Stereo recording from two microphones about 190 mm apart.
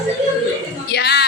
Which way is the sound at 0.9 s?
60° left (ahead or behind).